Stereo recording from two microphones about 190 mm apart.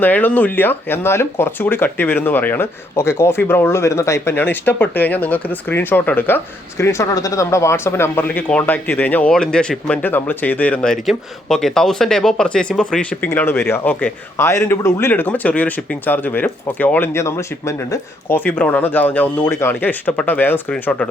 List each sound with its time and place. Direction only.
0.0 s speech: 10° left (ahead or behind)